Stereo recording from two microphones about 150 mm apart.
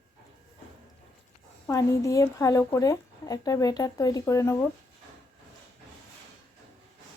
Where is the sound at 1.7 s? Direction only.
20° left (ahead or behind).